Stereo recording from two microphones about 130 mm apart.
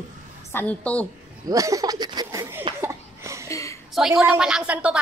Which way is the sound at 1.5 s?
25° right (ahead or behind).